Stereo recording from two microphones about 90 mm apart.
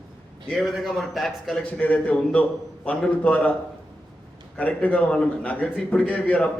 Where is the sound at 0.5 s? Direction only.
Centre (ahead or behind).